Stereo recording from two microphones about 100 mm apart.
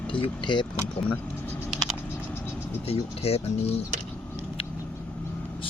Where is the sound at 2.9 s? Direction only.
85° left.